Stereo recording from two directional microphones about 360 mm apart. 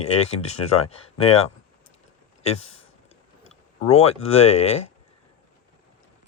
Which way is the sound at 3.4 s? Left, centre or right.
Centre.